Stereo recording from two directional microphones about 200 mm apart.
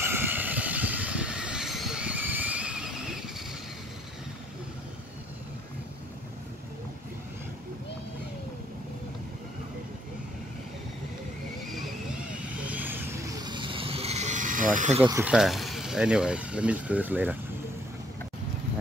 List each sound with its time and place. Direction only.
0.0 s vehicle: 10° right (ahead or behind)
11.6 s vehicle: centre (ahead or behind); by 15.0 s 40° right (ahead or behind)
15.0 s speech: 10° right (ahead or behind)